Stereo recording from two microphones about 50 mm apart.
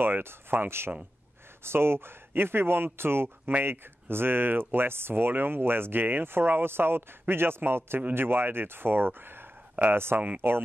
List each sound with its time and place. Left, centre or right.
0.0 s speech: right